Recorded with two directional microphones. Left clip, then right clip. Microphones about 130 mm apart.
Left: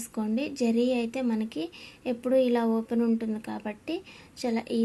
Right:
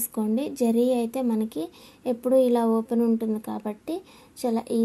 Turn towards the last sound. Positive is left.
turn(degrees=-40)  # may be behind; listen again after turning